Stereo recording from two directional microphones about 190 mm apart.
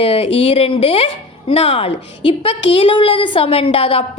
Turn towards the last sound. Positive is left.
turn(degrees=30)  # may be behind; listen again after turning